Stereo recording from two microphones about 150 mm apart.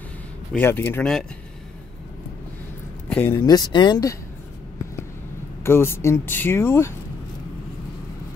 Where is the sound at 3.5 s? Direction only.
30° left (ahead or behind).